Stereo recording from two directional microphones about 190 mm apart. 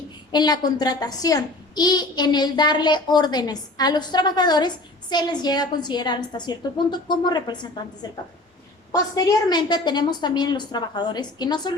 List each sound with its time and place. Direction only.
0.3 s a woman's voice: 20° left (ahead or behind)